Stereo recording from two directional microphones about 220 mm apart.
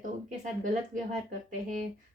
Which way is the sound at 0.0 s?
35° right (ahead or behind).